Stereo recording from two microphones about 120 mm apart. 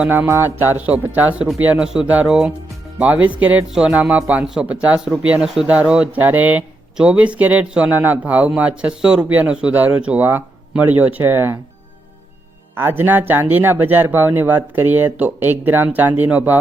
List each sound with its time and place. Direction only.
0.0 s speech: 15° right (ahead or behind)
12.7 s speech: 15° right (ahead or behind)